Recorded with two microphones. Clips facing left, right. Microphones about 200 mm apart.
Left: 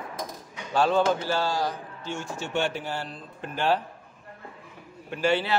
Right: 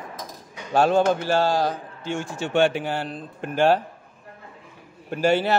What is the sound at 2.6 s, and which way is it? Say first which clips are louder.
A man's voice: right 11 dB; 65° right (ahead or behind).